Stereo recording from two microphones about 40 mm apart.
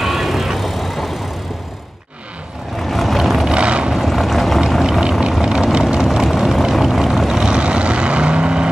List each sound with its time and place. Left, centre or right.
0.0 s vehicle: centre
2.9 s vehicle: centre
3.5 s vehicle: right
3.9 s boat: centre
5.4 s vehicle: centre
6.1 s vehicle: centre
7.3 s vehicle: right